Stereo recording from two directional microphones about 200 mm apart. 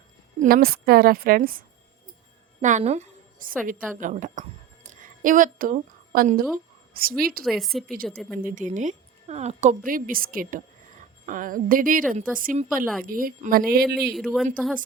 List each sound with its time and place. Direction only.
0.3 s a woman's voice: 45° right (ahead or behind)
4.0 s a sound: 40° right (ahead or behind)
7.2 s a woman's voice: 45° right (ahead or behind)
7.4 s a woman's voice: centre (ahead or behind)
8.4 s a woman's voice: 40° right (ahead or behind)
14.2 s a woman's voice: centre (ahead or behind)